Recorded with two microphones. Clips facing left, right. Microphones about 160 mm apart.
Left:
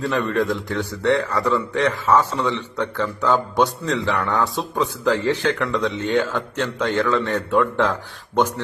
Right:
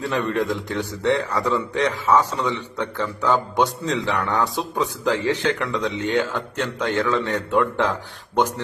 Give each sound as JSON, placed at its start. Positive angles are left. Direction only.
{"t": 0.1, "sound": "a man's voice", "side_deg": -15}